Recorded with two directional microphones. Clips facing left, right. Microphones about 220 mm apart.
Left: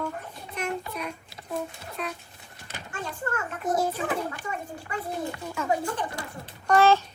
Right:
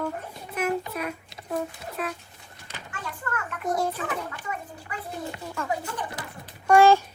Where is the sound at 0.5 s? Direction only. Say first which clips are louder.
Right 4 dB; 5° right (ahead or behind).